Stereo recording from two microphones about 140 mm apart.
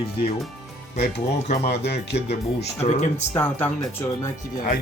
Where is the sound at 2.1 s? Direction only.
50° left (ahead or behind).